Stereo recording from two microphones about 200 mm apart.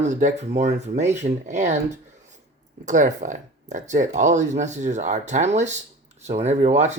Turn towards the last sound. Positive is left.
turn(degrees=-35)  # may be behind; listen again after turning